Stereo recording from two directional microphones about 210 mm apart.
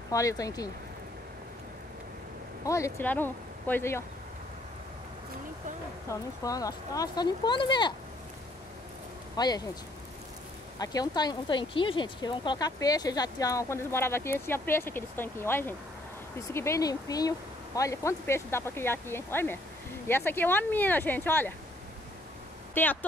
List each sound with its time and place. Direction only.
0.1 s speech: 15° left (ahead or behind)
2.6 s speech: 15° left (ahead or behind)
6.0 s speech: 15° left (ahead or behind)
9.4 s speech: 20° left (ahead or behind)
10.8 s speech: 20° left (ahead or behind)
22.8 s speech: 10° left (ahead or behind)